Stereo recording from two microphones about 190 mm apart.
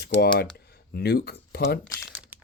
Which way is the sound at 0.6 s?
55° left (ahead or behind).